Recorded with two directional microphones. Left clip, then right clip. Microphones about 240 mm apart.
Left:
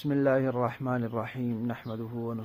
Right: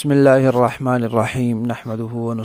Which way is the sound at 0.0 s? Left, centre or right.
Right.